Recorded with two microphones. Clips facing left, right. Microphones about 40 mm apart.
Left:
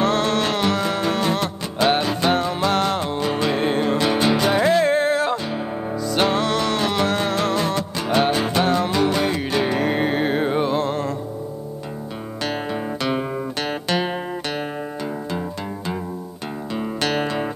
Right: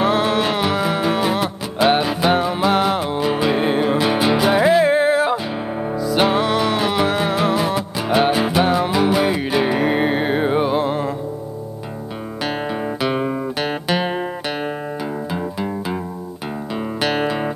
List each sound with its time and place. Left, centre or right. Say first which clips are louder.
0.0 s music: right 2 dB; centre
12.4 s music: right 2 dB; centre
17.0 s music: right 3 dB; centre